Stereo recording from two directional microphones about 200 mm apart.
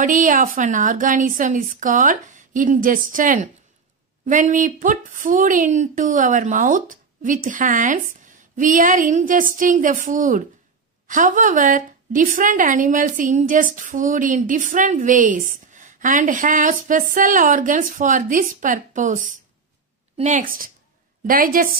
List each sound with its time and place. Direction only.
0.0 s a woman's voice: 40° right (ahead or behind)